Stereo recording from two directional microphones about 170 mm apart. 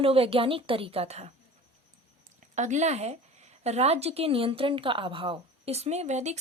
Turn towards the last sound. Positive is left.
turn(degrees=-40)  # may be behind; listen again after turning